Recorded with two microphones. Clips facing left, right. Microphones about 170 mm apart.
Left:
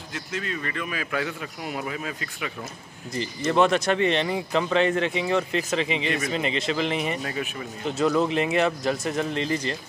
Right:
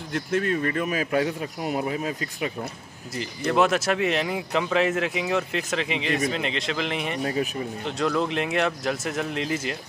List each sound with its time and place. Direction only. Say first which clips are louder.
0.1 s a man's voice: right 8 dB; 55° right (ahead or behind); by 2.5 s 35° right (ahead or behind)
3.2 s a man's voice: left 1 dB; centre (ahead or behind)
7.2 s a man's voice: right 5 dB; 30° right (ahead or behind)
7.8 s a man's voice: left 3 dB; 5° left (ahead or behind)